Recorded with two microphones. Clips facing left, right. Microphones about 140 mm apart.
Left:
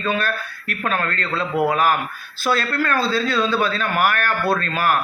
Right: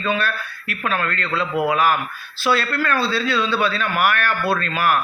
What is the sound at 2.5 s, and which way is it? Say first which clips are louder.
A man's voice: right 1 dB; 45° left (ahead or behind).